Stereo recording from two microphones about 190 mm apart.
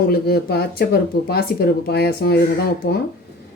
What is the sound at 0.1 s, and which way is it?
Speech, 55° left (ahead or behind).